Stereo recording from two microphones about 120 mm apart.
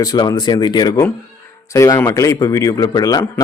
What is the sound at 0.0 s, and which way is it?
A man's voice, 30° left (ahead or behind).